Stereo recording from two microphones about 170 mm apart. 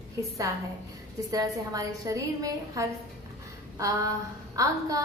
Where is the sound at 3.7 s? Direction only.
20° right (ahead or behind).